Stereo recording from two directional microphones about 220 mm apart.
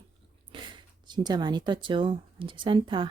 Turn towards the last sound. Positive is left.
turn(degrees=-20)  # may be behind; listen again after turning